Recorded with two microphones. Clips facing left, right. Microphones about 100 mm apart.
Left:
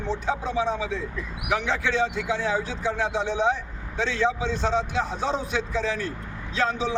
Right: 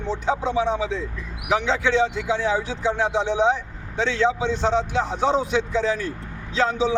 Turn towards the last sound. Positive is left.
turn(degrees=-20)  # may be behind; listen again after turning